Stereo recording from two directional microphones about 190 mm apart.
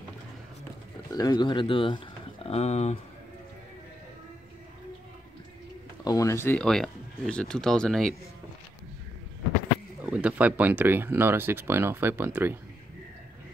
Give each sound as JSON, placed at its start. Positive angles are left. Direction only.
{"t": 1.1, "sound": "speech", "side_deg": 20}
{"t": 6.0, "sound": "speech", "side_deg": 15}
{"t": 10.0, "sound": "speech", "side_deg": -5}